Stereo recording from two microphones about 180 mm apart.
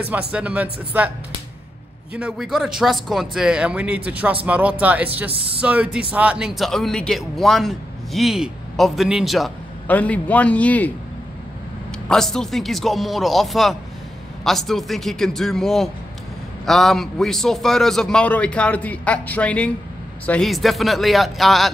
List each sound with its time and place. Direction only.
0.3 s speech: 5° right (ahead or behind)
2.1 s a man's voice: 5° right (ahead or behind)
5.3 s speech: 30° right (ahead or behind)
5.6 s a man's voice: 5° right (ahead or behind); by 10.9 s 10° left (ahead or behind)
12.1 s a man's voice: centre (ahead or behind)